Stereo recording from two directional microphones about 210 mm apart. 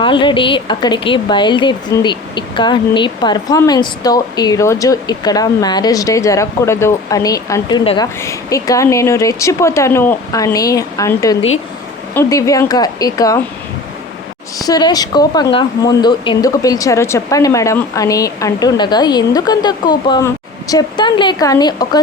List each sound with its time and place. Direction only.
0.0 s a woman's voice: 25° left (ahead or behind)
14.6 s a woman's voice: 20° left (ahead or behind)